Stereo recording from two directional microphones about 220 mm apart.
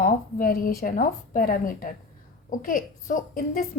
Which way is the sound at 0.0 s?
40° left (ahead or behind).